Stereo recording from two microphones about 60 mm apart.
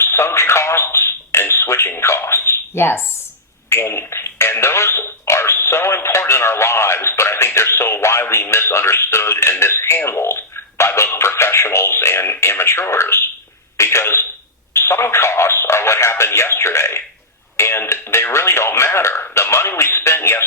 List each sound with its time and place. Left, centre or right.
0.0 s a sound: left
2.0 s speech: left
3.7 s radio: left
13.7 s a sound: left
14.7 s telephone: left
17.6 s radio: left